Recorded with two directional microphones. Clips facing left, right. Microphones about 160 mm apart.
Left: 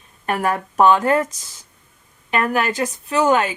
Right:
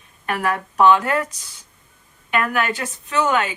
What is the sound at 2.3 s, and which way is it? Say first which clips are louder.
Speech: left 1 dB; 35° left (ahead or behind).